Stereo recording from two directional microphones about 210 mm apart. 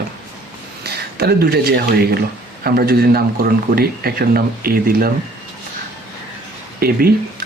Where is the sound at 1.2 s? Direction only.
50° right (ahead or behind).